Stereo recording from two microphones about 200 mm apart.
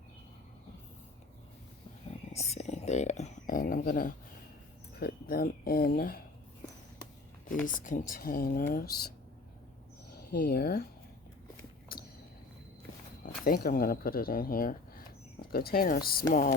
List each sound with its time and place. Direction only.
2.3 s a sound: 35° left (ahead or behind)
4.9 s speech: 50° left (ahead or behind)
7.6 s speech: 40° left (ahead or behind)
10.2 s speech: 50° left (ahead or behind)
11.9 s a sound: 45° left (ahead or behind)
13.2 s speech: 45° left (ahead or behind)